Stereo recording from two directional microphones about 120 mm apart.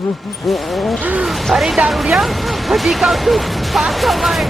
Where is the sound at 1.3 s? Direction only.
Centre (ahead or behind).